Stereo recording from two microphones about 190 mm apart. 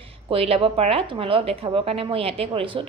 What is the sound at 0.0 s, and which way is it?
A woman's voice, 30° right (ahead or behind).